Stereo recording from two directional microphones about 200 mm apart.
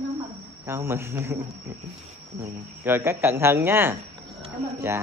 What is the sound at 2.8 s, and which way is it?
Speech, 10° right (ahead or behind).